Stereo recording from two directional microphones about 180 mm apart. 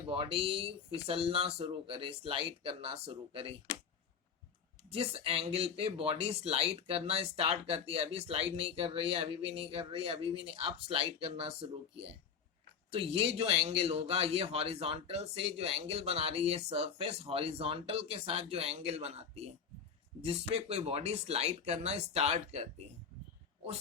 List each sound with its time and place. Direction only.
0.1 s speech: 30° right (ahead or behind)
4.9 s speech: 30° right (ahead or behind)
20.5 s speech: 35° right (ahead or behind)